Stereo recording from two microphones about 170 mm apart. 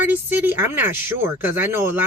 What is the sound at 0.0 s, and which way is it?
Speech, 10° right (ahead or behind).